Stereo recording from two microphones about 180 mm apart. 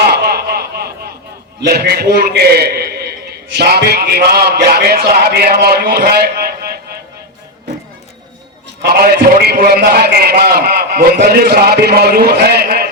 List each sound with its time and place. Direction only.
0.0 s a sound: 65° right (ahead or behind)
1.6 s a man's voice: 65° right (ahead or behind)
8.8 s a man's voice: 55° right (ahead or behind)